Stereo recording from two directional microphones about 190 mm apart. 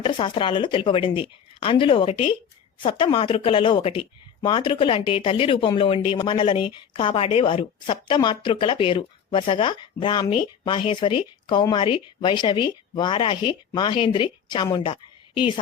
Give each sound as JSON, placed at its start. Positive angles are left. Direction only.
{"t": 0.0, "sound": "speech", "side_deg": 25}